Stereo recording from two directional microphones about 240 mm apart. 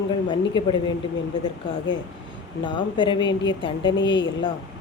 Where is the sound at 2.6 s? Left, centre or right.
Centre.